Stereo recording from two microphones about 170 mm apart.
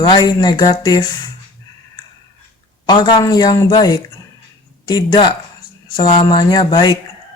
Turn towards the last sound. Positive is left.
turn(degrees=25)  # may be behind; listen again after turning